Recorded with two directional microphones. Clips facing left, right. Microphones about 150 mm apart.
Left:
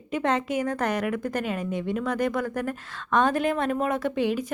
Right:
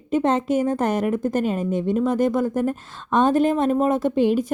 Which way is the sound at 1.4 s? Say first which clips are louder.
Right 6 dB; 40° right (ahead or behind).